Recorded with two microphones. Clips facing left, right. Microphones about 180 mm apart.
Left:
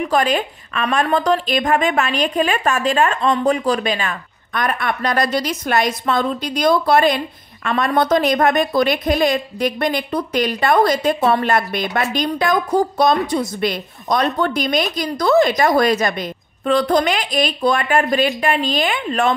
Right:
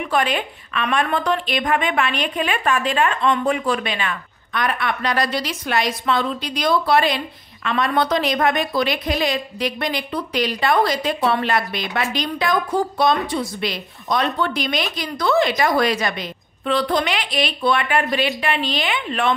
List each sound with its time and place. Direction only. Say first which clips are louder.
0.0 s a woman's voice: left 3 dB; 40° left (ahead or behind)